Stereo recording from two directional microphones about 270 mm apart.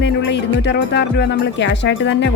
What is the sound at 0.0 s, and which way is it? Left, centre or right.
Speech, left.